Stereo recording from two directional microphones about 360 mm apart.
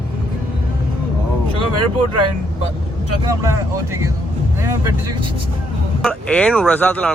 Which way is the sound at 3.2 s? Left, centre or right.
Centre.